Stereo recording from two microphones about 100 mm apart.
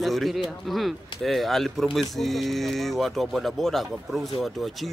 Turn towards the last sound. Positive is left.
turn(degrees=0)  # may be behind; listen again after turning